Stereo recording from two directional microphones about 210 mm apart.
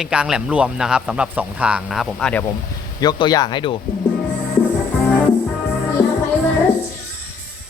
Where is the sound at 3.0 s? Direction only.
20° left (ahead or behind).